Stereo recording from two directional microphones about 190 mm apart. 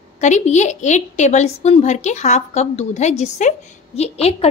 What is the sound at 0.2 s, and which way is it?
A woman's voice, 40° left (ahead or behind).